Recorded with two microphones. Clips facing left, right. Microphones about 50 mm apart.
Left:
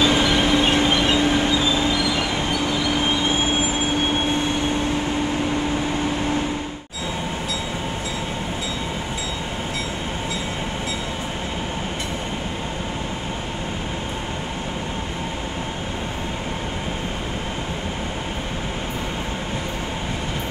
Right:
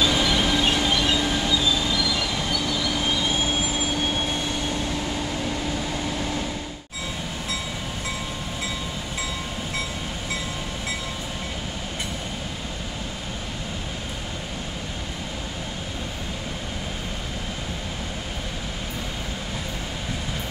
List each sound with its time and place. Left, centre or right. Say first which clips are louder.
0.0 s train: left 4 dB; left